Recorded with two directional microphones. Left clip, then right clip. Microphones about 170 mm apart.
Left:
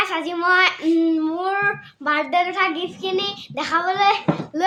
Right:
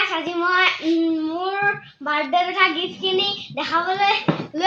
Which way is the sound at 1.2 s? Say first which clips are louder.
Left 1 dB; 30° left (ahead or behind).